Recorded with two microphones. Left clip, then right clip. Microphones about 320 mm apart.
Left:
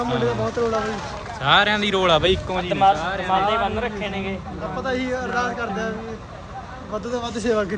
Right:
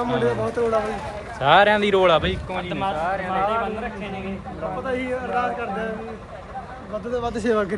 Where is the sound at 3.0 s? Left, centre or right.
Centre.